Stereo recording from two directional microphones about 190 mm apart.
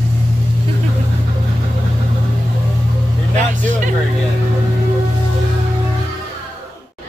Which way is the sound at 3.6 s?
40° right (ahead or behind).